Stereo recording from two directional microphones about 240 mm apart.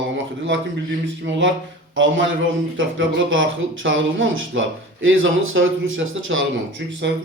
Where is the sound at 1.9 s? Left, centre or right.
Right.